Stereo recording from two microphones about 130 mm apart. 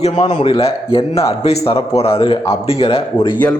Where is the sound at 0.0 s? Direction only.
60° left (ahead or behind).